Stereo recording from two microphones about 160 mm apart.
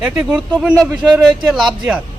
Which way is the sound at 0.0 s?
10° right (ahead or behind).